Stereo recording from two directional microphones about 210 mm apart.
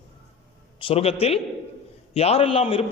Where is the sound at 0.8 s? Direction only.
30° left (ahead or behind).